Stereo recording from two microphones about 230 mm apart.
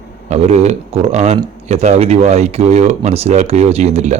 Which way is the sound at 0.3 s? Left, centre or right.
Right.